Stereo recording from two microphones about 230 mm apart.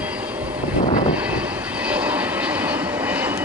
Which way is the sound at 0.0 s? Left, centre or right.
Centre.